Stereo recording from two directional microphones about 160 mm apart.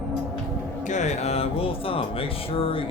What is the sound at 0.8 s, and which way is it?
Speech, 50° left (ahead or behind).